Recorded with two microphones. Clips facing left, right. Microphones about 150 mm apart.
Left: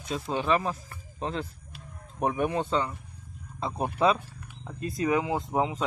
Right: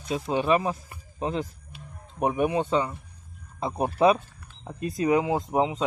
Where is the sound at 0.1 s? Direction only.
15° right (ahead or behind).